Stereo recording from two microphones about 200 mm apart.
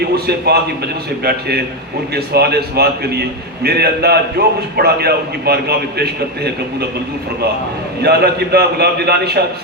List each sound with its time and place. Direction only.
0.0 s a man's voice: 55° right (ahead or behind)
8.0 s a man's voice: 55° right (ahead or behind)